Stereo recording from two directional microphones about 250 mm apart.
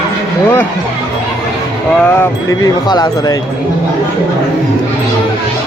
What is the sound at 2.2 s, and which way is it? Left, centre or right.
Speech, centre.